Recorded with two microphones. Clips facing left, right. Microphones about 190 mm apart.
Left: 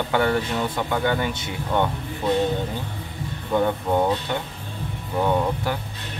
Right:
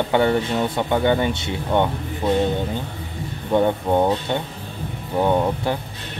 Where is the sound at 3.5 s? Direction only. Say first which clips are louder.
Right 3 dB; 20° right (ahead or behind).